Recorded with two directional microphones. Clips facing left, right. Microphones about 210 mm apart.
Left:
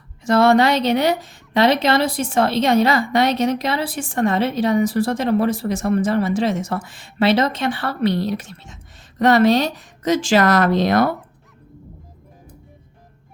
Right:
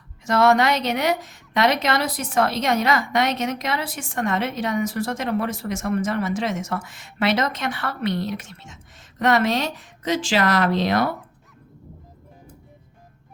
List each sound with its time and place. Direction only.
0.3 s a woman's voice: 30° left (ahead or behind); by 11.1 s 45° left (ahead or behind)